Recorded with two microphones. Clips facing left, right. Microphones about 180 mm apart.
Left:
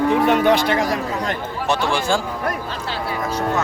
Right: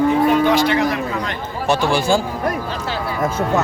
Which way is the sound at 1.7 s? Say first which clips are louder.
Right 4 dB; 10° right (ahead or behind).